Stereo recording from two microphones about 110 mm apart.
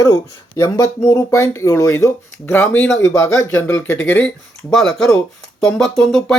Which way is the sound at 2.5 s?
15° left (ahead or behind).